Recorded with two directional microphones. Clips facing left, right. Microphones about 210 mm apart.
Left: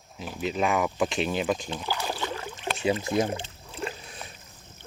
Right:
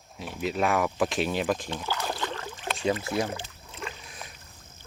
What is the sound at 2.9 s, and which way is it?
Rowboat, 20° left (ahead or behind).